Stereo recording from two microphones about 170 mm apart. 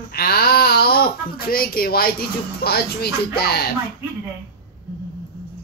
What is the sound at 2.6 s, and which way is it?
Speech, 65° left (ahead or behind).